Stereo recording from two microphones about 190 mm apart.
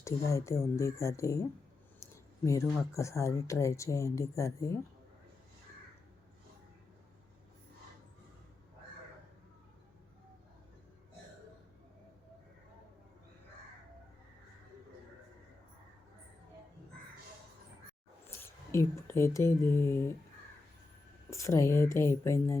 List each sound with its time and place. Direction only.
0.0 s speech: 15° left (ahead or behind)
18.3 s speech: 15° left (ahead or behind)
21.2 s speech: 15° left (ahead or behind)